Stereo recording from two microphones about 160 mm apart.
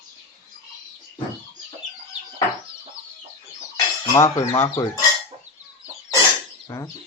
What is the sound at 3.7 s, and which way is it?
Speech, 20° left (ahead or behind).